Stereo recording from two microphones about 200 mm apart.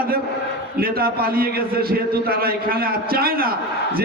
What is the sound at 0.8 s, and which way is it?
Speech, 50° right (ahead or behind).